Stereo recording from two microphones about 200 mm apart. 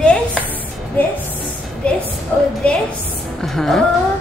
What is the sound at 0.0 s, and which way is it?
Music, 5° left (ahead or behind).